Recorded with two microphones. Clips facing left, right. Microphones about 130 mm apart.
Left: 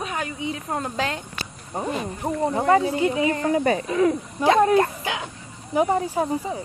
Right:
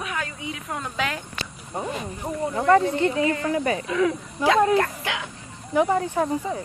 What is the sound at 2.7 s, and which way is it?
Speech, 10° left (ahead or behind).